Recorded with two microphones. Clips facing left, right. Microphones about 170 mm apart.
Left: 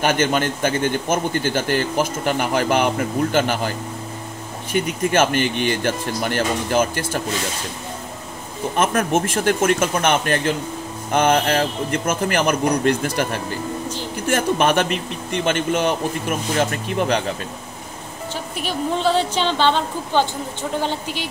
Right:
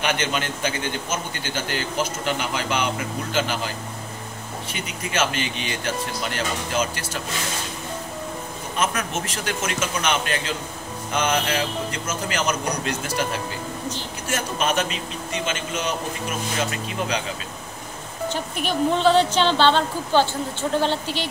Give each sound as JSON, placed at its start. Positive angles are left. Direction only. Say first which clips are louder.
{"t": 0.0, "sound": "a man's voice", "louder": "left 6 dB", "side_deg": 45}
{"t": 4.7, "sound": "a man's voice", "louder": "left 9 dB", "side_deg": 50}
{"t": 8.7, "sound": "a man's voice", "louder": "left 7 dB", "side_deg": 50}
{"t": 19.0, "sound": "speech", "louder": "right 2 dB", "side_deg": 10}
{"t": 20.8, "sound": "speech", "louder": "right 1 dB", "side_deg": 10}